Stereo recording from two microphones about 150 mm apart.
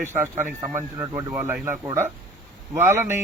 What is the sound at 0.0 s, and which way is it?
Speech, 15° right (ahead or behind).